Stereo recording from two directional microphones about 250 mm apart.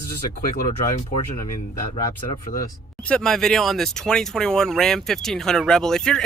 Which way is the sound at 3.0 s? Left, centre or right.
Centre.